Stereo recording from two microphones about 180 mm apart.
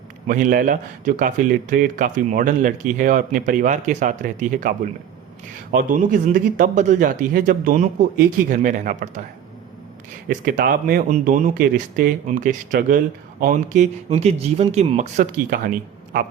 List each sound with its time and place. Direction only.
0.3 s a man's voice: 50° right (ahead or behind)
5.7 s a man's voice: 45° right (ahead or behind)
10.2 s a man's voice: 50° right (ahead or behind)
14.1 s speech: 35° right (ahead or behind); by 15.7 s 50° right (ahead or behind)